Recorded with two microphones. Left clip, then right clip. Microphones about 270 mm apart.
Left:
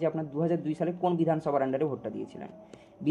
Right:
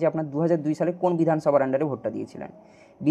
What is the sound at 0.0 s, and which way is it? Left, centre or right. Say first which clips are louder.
Speech: right 6 dB; centre.